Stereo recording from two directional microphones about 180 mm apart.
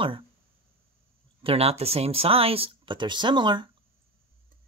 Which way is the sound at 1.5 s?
35° right (ahead or behind).